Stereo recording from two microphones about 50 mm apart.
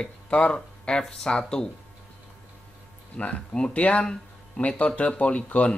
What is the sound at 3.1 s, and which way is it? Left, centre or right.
Speech, left.